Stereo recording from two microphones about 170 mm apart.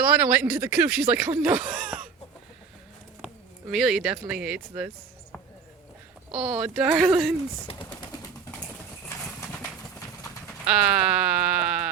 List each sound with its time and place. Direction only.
0.0 s speech: 10° right (ahead or behind)
3.7 s speech: centre (ahead or behind)
6.3 s speech: 5° right (ahead or behind)
7.7 s speech: 30° left (ahead or behind)
9.0 s horse: 10° left (ahead or behind)
10.7 s speech: 5° right (ahead or behind)